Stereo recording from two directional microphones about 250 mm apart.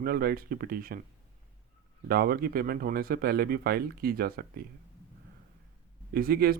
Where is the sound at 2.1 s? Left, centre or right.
Right.